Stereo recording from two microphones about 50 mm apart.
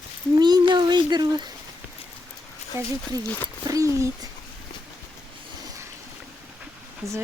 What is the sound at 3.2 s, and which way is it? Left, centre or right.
Speech, left.